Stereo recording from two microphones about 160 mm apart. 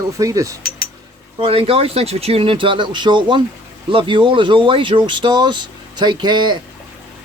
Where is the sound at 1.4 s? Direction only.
35° right (ahead or behind).